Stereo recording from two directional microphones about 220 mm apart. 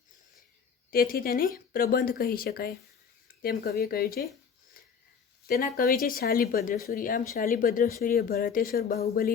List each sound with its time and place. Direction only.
0.9 s speech: 40° left (ahead or behind)
5.5 s speech: 40° left (ahead or behind)